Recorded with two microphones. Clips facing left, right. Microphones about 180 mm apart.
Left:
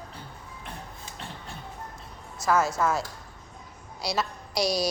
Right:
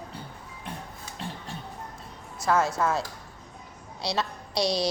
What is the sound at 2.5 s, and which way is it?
Speech, 30° right (ahead or behind).